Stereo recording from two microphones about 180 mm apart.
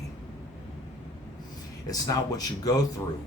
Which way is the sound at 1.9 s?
20° left (ahead or behind).